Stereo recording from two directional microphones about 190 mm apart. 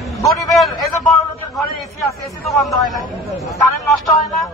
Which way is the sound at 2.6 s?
Centre (ahead or behind).